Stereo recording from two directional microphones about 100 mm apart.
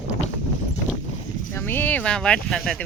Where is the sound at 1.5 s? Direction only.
20° left (ahead or behind); by 2.8 s 5° left (ahead or behind).